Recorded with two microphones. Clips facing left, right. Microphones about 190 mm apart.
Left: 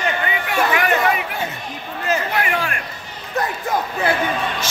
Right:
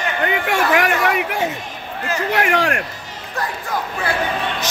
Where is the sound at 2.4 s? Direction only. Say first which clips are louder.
Right 4 dB; 80° right.